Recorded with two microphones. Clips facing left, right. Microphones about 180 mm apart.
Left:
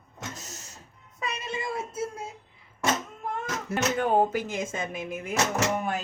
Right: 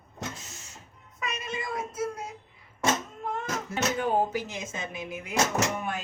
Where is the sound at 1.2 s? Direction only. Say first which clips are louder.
Left 2 dB; 30° left (ahead or behind).